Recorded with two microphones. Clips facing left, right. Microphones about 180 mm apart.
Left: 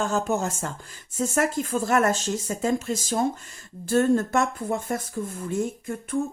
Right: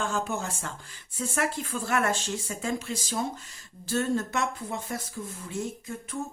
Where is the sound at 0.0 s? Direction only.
40° left (ahead or behind).